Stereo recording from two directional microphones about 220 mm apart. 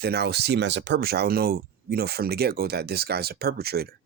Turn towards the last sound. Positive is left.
turn(degrees=-45)  # may be behind; listen again after turning